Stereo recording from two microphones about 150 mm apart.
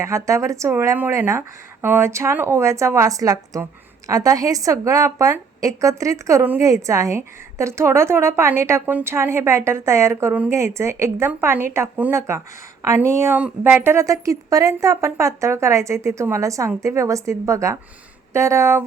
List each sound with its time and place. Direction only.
0.0 s a woman's voice: 20° right (ahead or behind)